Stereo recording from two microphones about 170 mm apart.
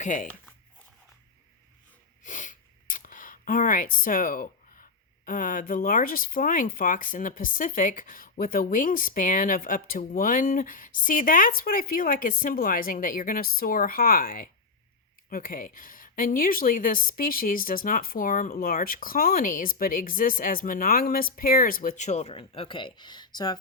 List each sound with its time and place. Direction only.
0.0 s speech: 50° left (ahead or behind)
2.2 s speech: 50° left (ahead or behind); by 23.6 s 25° left (ahead or behind)